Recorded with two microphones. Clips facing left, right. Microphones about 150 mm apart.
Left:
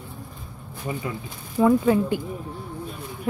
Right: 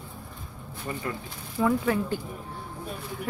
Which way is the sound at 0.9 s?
10° left (ahead or behind).